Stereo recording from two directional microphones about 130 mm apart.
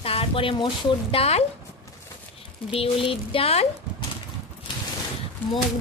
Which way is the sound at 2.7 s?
45° left (ahead or behind).